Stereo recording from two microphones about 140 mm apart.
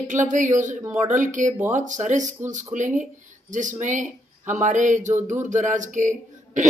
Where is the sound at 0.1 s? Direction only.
65° right (ahead or behind).